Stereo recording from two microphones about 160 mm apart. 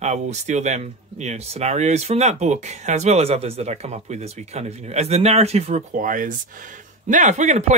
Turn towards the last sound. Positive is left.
turn(degrees=-45)  # may be behind; listen again after turning